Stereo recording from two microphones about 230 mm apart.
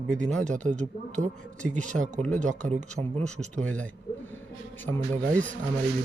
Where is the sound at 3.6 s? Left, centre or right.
Centre.